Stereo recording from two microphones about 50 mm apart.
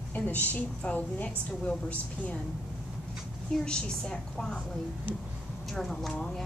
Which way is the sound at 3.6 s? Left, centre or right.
Centre.